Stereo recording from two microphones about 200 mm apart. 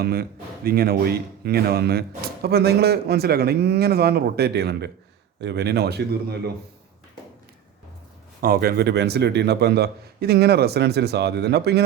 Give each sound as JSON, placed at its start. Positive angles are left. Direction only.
{"t": 0.0, "sound": "speech", "side_deg": -50}
{"t": 8.4, "sound": "a man's voice", "side_deg": -50}